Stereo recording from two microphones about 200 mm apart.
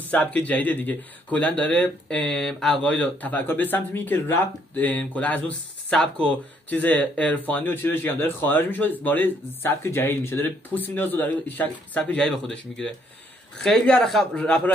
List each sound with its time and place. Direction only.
0.1 s speech: 5° left (ahead or behind)